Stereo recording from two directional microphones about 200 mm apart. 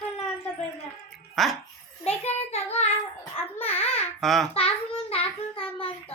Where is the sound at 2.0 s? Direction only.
30° left (ahead or behind).